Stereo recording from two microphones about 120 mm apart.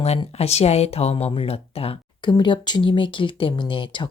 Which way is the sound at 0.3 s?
60° left (ahead or behind).